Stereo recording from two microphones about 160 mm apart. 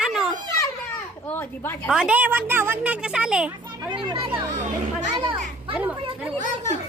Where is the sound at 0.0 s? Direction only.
5° right (ahead or behind).